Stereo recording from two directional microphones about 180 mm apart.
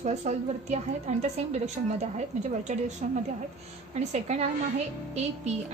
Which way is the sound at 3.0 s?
40° right (ahead or behind).